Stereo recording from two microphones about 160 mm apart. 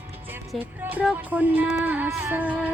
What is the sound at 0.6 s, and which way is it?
Music, 10° right (ahead or behind).